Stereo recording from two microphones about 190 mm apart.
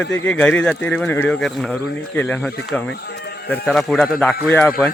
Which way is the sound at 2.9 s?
60° left (ahead or behind).